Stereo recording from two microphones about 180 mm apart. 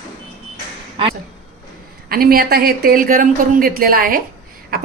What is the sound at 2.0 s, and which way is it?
A woman's voice, 55° right (ahead or behind).